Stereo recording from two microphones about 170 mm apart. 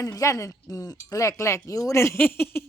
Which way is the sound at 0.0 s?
20° left (ahead or behind).